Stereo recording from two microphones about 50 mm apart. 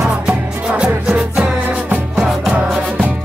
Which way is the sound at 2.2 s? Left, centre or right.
Centre.